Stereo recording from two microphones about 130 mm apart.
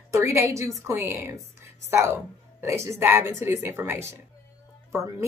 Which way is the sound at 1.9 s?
20° right (ahead or behind).